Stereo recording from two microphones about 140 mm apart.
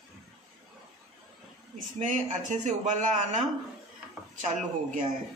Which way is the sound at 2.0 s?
65° right (ahead or behind).